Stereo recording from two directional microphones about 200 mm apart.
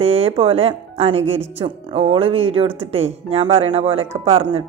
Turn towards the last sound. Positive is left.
turn(degrees=-30)  # may be behind; listen again after turning